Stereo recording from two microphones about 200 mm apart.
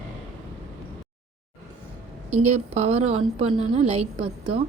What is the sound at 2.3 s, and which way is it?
A woman's voice, 35° right (ahead or behind).